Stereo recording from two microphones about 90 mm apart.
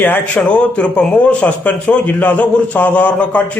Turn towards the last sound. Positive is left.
turn(degrees=15)  # may be behind; listen again after turning